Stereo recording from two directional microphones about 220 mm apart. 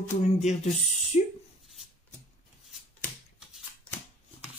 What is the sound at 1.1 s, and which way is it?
Speech, 35° left (ahead or behind).